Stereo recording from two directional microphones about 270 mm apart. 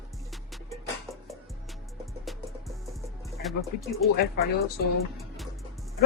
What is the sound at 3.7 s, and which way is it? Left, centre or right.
Speech, left.